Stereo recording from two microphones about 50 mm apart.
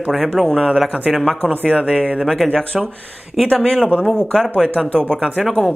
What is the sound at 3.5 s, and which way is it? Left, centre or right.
Speech, centre.